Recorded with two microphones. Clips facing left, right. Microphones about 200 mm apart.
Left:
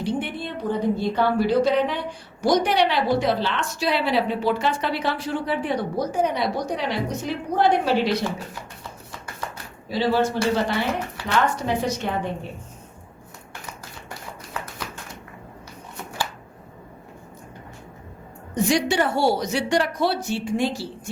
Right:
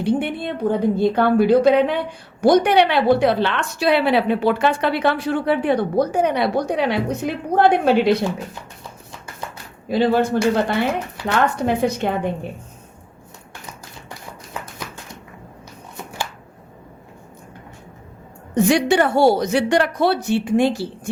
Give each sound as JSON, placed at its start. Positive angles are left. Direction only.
{"t": 0.0, "sound": "a woman's voice", "side_deg": -60}
{"t": 9.9, "sound": "a woman's voice", "side_deg": -55}
{"t": 18.5, "sound": "a woman's voice", "side_deg": -60}